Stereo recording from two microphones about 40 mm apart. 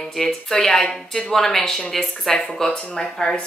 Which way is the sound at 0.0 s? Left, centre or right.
Centre.